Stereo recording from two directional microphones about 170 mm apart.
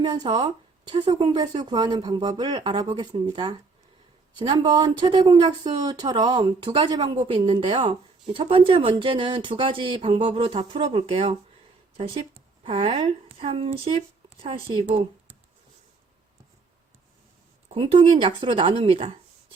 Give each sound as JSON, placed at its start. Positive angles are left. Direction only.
{"t": 0.0, "sound": "speech", "side_deg": -25}
{"t": 17.7, "sound": "speech", "side_deg": -30}